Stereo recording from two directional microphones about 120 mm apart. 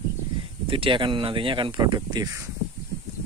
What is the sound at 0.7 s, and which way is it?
Speech, 45° right (ahead or behind).